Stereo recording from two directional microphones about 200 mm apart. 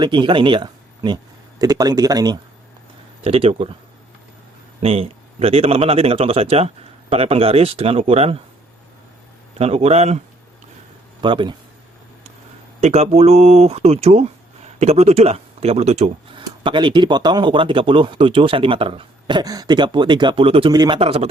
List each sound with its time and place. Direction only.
0.0 s speech: 25° right (ahead or behind)
4.8 s speech: 30° right (ahead or behind)
9.6 s speech: 30° right (ahead or behind)
12.8 s speech: 30° right (ahead or behind)